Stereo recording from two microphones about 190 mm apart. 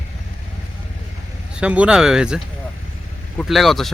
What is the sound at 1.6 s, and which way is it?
Speech, 5° right (ahead or behind).